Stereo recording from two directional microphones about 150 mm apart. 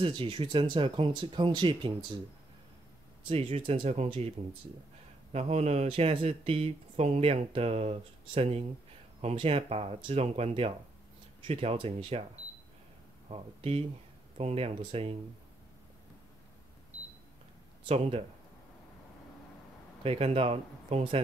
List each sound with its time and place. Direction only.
0.0 s speech: 35° right (ahead or behind)
3.3 s speech: 40° right (ahead or behind)
5.3 s speech: 45° right (ahead or behind)
13.3 s speech: 40° right (ahead or behind)
17.8 s speech: 45° right (ahead or behind)
20.0 s speech: 40° right (ahead or behind)